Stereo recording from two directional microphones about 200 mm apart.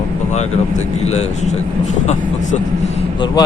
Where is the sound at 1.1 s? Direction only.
35° left (ahead or behind).